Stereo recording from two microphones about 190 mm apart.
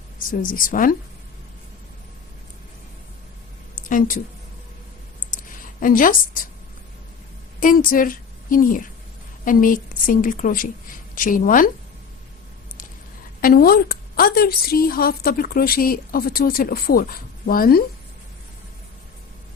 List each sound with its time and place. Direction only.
0.2 s a woman's voice: 45° left (ahead or behind)
3.8 s a sound: 45° left (ahead or behind)
5.8 s a woman's voice: 45° left (ahead or behind)
7.6 s a woman's voice: 45° left (ahead or behind)
13.4 s a woman's voice: 50° left (ahead or behind)